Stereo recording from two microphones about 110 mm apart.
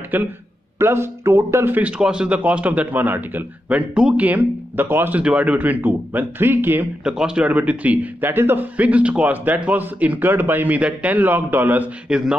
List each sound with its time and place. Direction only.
0.1 s speech: 15° right (ahead or behind)
7.2 s speech: 10° right (ahead or behind)